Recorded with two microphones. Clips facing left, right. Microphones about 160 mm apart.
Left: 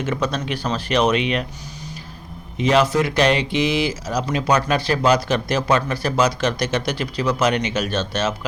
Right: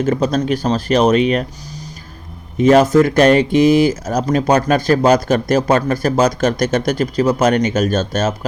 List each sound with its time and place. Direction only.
0.0 s speech: 40° right (ahead or behind)
2.6 s speech: 45° right (ahead or behind)